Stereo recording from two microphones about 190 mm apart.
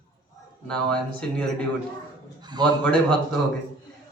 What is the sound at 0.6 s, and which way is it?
A man's voice, 5° left (ahead or behind).